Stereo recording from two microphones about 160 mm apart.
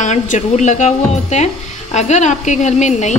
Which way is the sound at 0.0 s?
50° left (ahead or behind).